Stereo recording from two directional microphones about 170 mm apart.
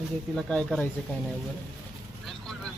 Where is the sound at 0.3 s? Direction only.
5° left (ahead or behind).